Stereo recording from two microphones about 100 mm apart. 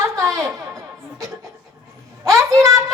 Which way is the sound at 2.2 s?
30° right (ahead or behind).